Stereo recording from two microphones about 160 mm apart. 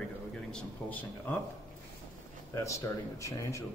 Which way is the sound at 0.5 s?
10° left (ahead or behind).